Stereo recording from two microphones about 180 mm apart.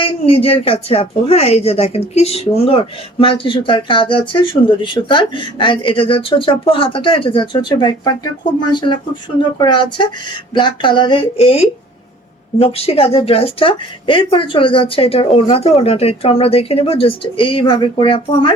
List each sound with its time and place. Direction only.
0.0 s speech: 30° left (ahead or behind)
9.6 s speech: 25° left (ahead or behind)